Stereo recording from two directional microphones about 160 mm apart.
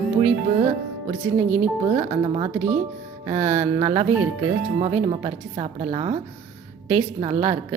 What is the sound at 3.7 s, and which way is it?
Speech, 35° right (ahead or behind).